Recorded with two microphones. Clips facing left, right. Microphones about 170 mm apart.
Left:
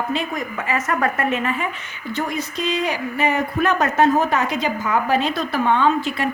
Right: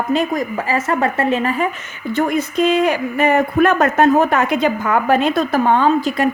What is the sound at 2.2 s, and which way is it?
A woman's voice, 55° right (ahead or behind).